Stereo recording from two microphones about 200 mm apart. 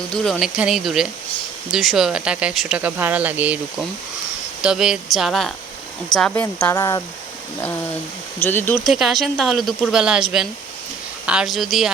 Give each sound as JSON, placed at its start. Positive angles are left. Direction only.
{"t": 0.1, "sound": "speech", "side_deg": 5}
{"t": 4.6, "sound": "speech", "side_deg": -5}
{"t": 8.4, "sound": "speech", "side_deg": 10}
{"t": 8.9, "sound": "speech", "side_deg": 0}